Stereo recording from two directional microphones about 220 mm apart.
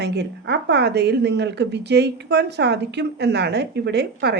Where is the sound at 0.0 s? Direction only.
50° right (ahead or behind).